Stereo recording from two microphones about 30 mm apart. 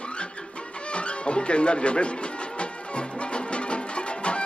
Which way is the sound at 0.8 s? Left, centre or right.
Left.